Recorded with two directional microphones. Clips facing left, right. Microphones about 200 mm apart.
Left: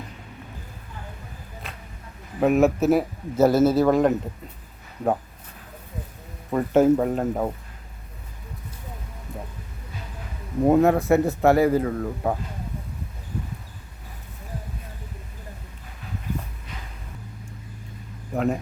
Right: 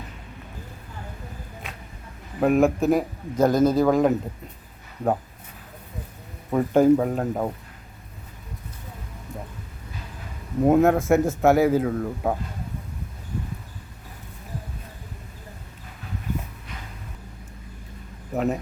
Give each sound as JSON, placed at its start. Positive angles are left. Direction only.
{"t": 2.4, "sound": "a man's voice", "side_deg": 5}
{"t": 6.5, "sound": "a man's voice", "side_deg": 0}
{"t": 10.6, "sound": "a man's voice", "side_deg": 0}
{"t": 18.3, "sound": "a man's voice", "side_deg": -5}